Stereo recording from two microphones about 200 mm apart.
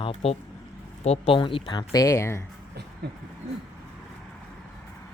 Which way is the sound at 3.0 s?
55° right (ahead or behind).